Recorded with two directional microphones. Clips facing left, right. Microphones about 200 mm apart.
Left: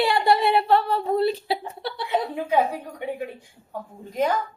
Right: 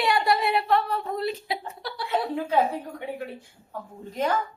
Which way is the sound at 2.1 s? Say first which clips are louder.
Left 1 dB; 15° left (ahead or behind).